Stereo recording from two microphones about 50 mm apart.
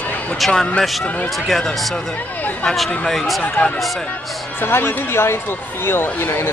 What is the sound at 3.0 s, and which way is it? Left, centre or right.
Speech, centre.